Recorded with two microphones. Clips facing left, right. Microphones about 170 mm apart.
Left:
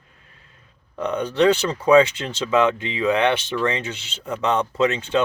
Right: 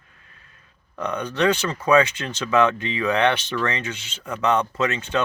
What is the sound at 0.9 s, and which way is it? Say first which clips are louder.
Speech: left 4 dB; 25° left (ahead or behind).